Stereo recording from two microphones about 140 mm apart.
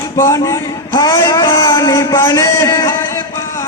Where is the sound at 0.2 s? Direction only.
20° left (ahead or behind).